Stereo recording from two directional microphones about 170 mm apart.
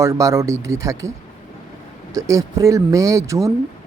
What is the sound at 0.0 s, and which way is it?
Speech, 20° right (ahead or behind).